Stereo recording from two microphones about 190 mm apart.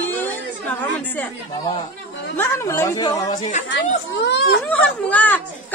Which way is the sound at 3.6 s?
70° left (ahead or behind).